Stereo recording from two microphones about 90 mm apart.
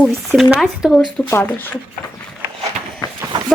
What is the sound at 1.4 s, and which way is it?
Speech, 20° left (ahead or behind).